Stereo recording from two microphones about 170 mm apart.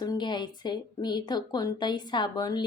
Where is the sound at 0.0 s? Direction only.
25° left (ahead or behind).